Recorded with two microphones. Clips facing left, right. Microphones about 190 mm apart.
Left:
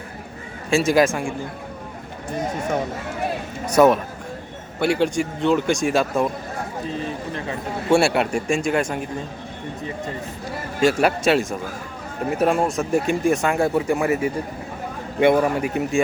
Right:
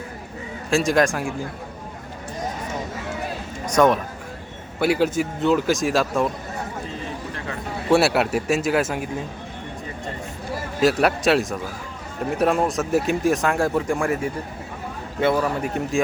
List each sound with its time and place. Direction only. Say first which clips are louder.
0.7 s speech: left 2 dB; centre (ahead or behind)
3.7 s speech: left 3 dB; 5° left (ahead or behind)
4.8 s speech: even; 5° right (ahead or behind)
7.9 s speech: even; centre (ahead or behind)
10.8 s speech: left 1 dB; centre (ahead or behind)
15.2 s a man's voice: left 4 dB; 20° left (ahead or behind)
15.6 s speech: left 2 dB; 5° left (ahead or behind)